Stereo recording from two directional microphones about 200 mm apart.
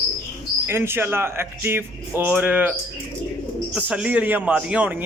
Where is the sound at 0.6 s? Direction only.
10° right (ahead or behind).